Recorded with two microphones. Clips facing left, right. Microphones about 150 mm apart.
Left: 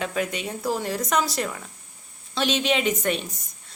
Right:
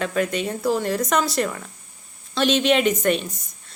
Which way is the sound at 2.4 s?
55° right (ahead or behind).